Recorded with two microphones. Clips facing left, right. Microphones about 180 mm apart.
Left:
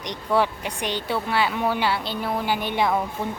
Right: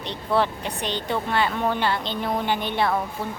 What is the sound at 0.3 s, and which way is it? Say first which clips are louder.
Speech: left 1 dB; 10° left (ahead or behind).